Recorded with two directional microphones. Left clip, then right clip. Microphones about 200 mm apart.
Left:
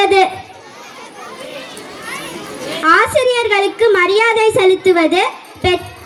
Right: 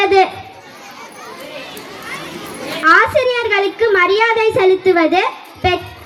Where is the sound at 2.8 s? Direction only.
60° left (ahead or behind).